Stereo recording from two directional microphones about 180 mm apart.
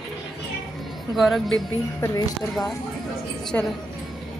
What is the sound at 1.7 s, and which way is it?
Speech, 20° left (ahead or behind).